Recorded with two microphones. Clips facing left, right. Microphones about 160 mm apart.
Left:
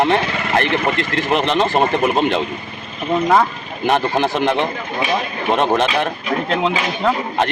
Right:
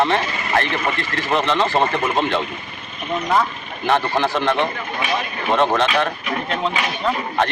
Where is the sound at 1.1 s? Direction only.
20° left (ahead or behind).